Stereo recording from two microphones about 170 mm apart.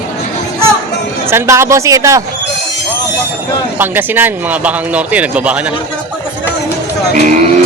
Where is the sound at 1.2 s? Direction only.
15° right (ahead or behind).